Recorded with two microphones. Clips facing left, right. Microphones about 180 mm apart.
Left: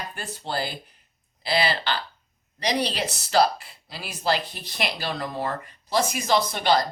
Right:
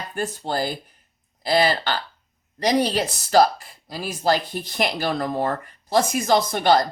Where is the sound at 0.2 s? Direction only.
45° right (ahead or behind).